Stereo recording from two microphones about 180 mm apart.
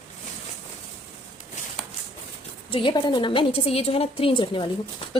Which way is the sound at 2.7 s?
30° left (ahead or behind).